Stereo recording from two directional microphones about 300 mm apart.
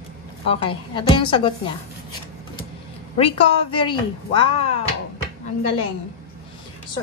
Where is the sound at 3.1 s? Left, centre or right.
Centre.